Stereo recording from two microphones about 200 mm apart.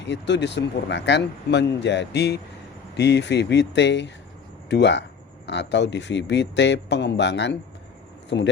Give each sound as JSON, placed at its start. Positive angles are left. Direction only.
{"t": 0.0, "sound": "speech", "side_deg": 60}